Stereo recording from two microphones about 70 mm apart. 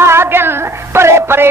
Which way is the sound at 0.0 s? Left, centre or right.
Right.